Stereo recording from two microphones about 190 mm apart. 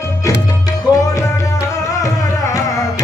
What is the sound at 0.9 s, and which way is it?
Music, 20° left (ahead or behind).